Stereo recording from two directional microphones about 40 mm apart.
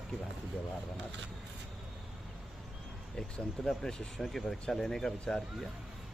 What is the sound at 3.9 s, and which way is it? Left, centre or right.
Speech, centre.